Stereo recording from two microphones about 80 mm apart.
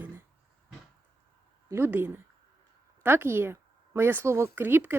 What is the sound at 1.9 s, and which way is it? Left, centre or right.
Speech, right.